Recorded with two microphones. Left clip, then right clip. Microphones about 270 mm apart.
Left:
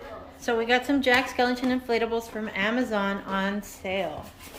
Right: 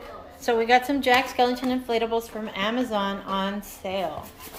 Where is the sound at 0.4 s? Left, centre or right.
Centre.